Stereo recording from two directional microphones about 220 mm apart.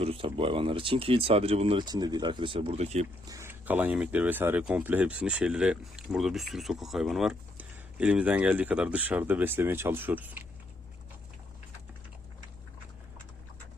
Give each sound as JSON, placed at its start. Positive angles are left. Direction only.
{"t": 0.0, "sound": "speech", "side_deg": -25}
{"t": 3.2, "sound": "speech", "side_deg": -15}